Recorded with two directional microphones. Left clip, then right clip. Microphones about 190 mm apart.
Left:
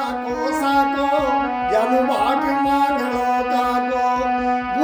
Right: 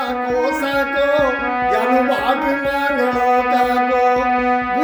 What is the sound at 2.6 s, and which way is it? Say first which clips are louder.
Music: right 1 dB; 10° left (ahead or behind).